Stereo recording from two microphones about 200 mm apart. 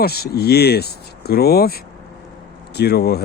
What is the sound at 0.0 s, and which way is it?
Speech, 50° left (ahead or behind).